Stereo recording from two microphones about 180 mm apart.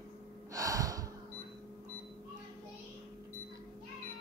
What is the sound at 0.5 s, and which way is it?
Gasp, 20° right (ahead or behind).